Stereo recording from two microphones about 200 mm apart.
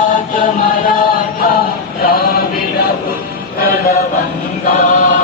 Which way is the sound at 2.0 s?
50° left (ahead or behind).